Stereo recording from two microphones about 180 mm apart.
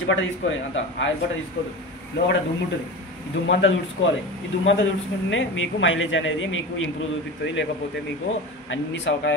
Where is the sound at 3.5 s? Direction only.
90° left.